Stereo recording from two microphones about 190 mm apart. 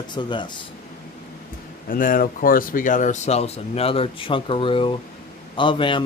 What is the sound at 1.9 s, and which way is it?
Speech, 45° left (ahead or behind).